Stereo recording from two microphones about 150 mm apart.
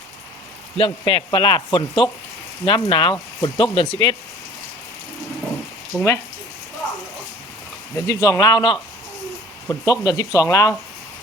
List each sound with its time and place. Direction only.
0.8 s speech: 35° left (ahead or behind)
5.9 s speech: centre (ahead or behind)
7.9 s speech: 20° left (ahead or behind)